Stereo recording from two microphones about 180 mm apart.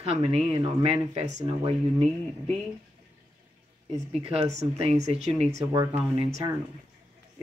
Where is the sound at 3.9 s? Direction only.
30° right (ahead or behind).